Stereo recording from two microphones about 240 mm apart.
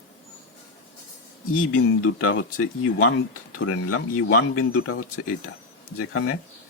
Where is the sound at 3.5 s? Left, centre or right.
Left.